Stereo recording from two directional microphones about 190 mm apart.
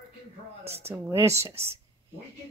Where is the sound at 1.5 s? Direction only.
30° right (ahead or behind).